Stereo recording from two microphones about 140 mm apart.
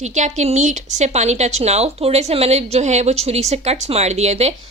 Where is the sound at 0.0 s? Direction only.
55° right (ahead or behind).